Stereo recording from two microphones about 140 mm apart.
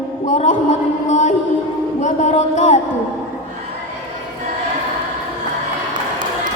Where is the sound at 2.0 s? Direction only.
55° left (ahead or behind).